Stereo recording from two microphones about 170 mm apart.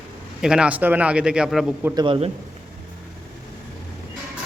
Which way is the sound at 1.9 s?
25° right (ahead or behind).